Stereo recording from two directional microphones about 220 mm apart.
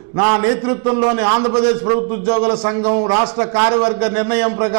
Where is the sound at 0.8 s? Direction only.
25° right (ahead or behind).